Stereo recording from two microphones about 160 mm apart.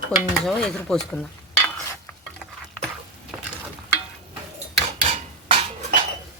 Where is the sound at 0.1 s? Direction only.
5° left (ahead or behind).